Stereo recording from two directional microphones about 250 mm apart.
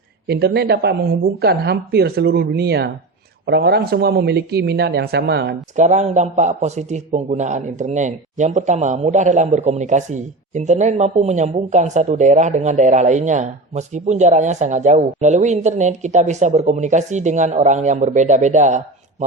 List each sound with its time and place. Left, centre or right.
0.3 s speech: right
5.7 s a man's voice: right